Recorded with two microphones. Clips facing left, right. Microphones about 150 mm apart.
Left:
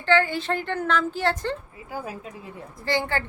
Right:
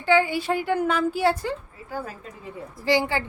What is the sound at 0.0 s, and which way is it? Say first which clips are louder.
A woman's voice: right 1 dB; 10° right (ahead or behind).